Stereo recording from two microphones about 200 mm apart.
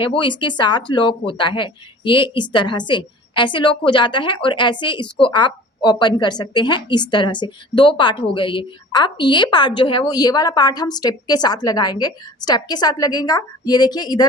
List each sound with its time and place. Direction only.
0.0 s a woman's voice: 25° left (ahead or behind)